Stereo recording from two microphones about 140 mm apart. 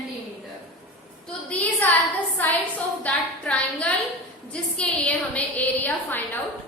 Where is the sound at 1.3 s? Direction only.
10° left (ahead or behind).